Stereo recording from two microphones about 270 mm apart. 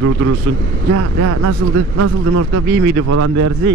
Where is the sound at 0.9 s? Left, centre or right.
Right.